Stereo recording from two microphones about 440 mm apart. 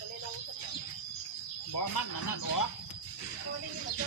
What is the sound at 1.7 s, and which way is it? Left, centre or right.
Speech, left.